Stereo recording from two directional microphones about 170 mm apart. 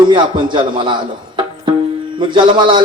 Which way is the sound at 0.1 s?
25° right (ahead or behind).